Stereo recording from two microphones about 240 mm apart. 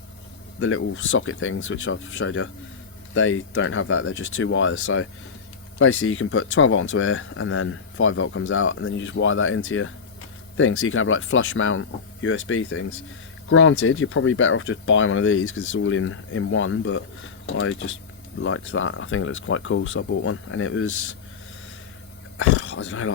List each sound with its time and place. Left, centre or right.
0.6 s speech: left
22.4 s speech: left